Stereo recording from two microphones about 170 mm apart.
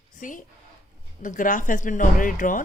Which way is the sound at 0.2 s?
50° left (ahead or behind).